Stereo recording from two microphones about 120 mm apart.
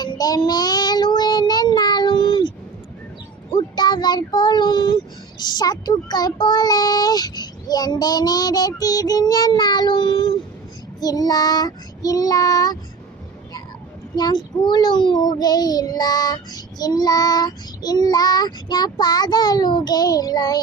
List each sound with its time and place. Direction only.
0.0 s child singing: 35° left (ahead or behind)
3.5 s child singing: 40° left (ahead or behind)
5.4 s a child's voice: 35° left (ahead or behind)
14.2 s a child's voice: 35° left (ahead or behind)